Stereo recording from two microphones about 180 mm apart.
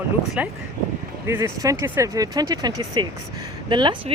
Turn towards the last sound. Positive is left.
turn(degrees=-25)  # may be behind; listen again after turning